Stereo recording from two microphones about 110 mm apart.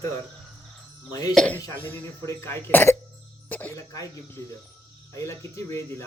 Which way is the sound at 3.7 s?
25° left (ahead or behind).